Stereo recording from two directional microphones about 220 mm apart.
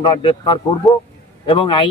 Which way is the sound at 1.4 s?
25° left (ahead or behind).